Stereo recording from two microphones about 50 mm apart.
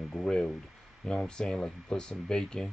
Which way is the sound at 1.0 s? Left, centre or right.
Centre.